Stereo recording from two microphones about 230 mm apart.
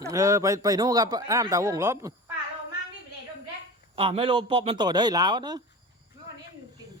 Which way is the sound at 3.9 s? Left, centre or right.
Right.